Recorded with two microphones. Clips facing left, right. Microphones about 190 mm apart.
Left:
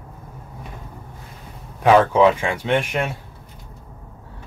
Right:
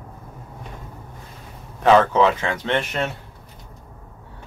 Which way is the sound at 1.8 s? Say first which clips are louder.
Left 1 dB; 10° left (ahead or behind).